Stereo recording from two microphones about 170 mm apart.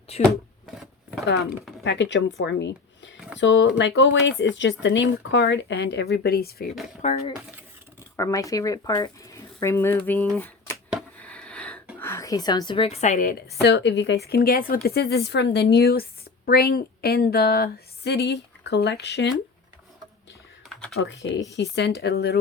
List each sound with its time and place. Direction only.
0.1 s speech: 40° left (ahead or behind)
1.3 s speech: 70° left (ahead or behind)
1.8 s speech: 90° left; by 6.7 s 65° left (ahead or behind)
7.0 s speech: 40° left (ahead or behind)
8.1 s speech: 20° left (ahead or behind)
11.2 s a sound: 10° left (ahead or behind)
11.9 s a woman's voice: 15° left (ahead or behind); by 13.3 s 50° left (ahead or behind)
13.6 s speech: 85° left
21.0 s speech: 90° left; by 22.4 s 70° left (ahead or behind)